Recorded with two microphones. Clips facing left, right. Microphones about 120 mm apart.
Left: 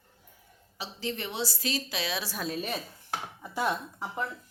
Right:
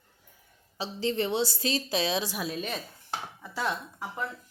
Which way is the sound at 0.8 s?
30° right (ahead or behind).